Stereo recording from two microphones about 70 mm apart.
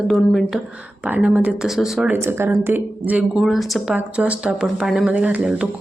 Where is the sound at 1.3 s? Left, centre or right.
Right.